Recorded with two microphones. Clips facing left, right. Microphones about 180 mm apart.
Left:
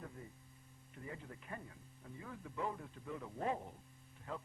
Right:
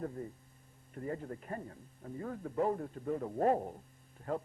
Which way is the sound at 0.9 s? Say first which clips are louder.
Right 10 dB; 45° right (ahead or behind).